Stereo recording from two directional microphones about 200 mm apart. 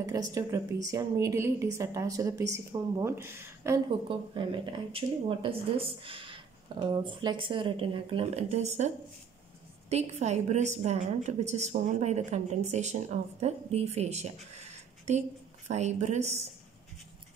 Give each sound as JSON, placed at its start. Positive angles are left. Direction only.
{"t": 0.0, "sound": "a woman's voice", "side_deg": -15}
{"t": 4.1, "sound": "a woman's voice", "side_deg": -25}